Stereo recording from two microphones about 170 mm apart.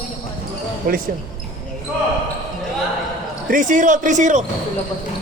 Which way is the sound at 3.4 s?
50° right (ahead or behind).